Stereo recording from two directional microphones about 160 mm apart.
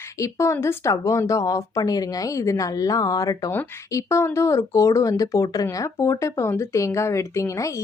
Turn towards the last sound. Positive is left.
turn(degrees=20)  # may be behind; listen again after turning